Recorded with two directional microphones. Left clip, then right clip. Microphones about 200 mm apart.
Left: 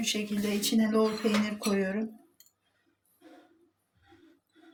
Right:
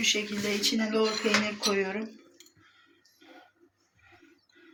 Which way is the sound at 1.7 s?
60° left (ahead or behind).